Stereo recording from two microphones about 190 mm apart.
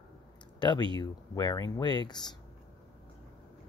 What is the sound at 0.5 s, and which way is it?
Speech, 25° left (ahead or behind).